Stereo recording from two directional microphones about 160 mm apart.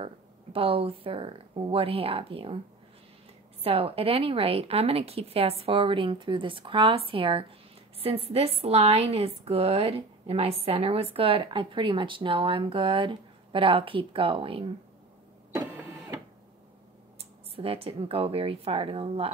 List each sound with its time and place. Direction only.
0.0 s a woman's voice: 35° right (ahead or behind)
3.6 s a woman's voice: 35° right (ahead or behind)
17.6 s a woman's voice: 35° right (ahead or behind)